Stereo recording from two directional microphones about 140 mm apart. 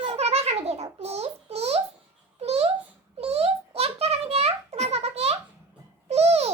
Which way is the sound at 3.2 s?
45° right (ahead or behind).